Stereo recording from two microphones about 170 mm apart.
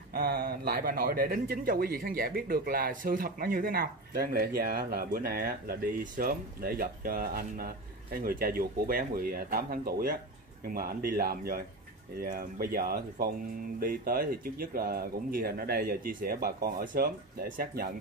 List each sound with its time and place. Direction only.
0.1 s a man's voice: 60° right (ahead or behind)